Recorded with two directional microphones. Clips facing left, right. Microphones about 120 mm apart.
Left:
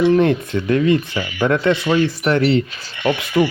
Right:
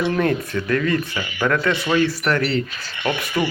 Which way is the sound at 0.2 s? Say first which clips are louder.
Left 4 dB; 20° left (ahead or behind).